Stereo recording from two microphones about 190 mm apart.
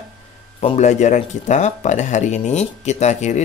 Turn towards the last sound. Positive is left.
turn(degrees=35)  # may be behind; listen again after turning